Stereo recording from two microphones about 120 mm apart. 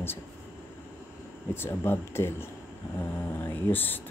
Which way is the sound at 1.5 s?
20° left (ahead or behind).